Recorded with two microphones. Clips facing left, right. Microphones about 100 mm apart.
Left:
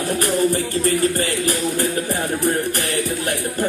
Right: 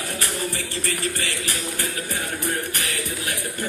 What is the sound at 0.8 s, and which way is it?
Music, 40° left (ahead or behind).